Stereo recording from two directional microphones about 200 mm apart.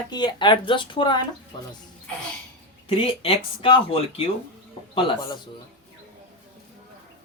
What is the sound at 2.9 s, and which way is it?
Speech, 30° left (ahead or behind).